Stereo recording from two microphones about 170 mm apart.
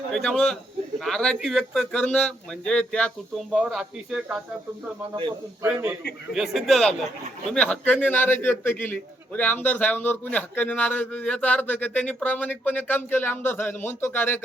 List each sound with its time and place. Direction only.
0.1 s speech: 5° left (ahead or behind)
5.6 s a man's voice: 10° right (ahead or behind); by 14.4 s 10° left (ahead or behind)